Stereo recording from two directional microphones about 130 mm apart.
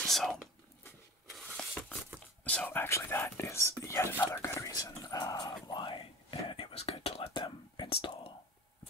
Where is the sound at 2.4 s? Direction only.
15° left (ahead or behind); by 6.0 s 35° left (ahead or behind).